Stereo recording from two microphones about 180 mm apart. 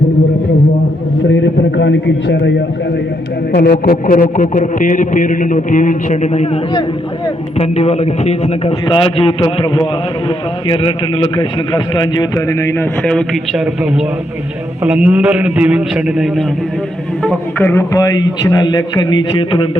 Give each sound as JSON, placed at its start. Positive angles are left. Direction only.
{"t": 1.7, "sound": "a man's voice", "side_deg": 85}
{"t": 3.5, "sound": "a man's voice", "side_deg": 60}
{"t": 7.6, "sound": "a man's voice", "side_deg": 35}
{"t": 13.0, "sound": "speech", "side_deg": 5}
{"t": 14.8, "sound": "a man's voice", "side_deg": -5}
{"t": 17.6, "sound": "a man's voice", "side_deg": 15}